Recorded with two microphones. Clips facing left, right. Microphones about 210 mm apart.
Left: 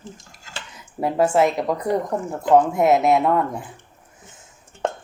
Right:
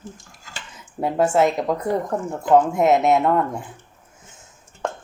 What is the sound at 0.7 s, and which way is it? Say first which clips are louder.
Speech: even; centre (ahead or behind).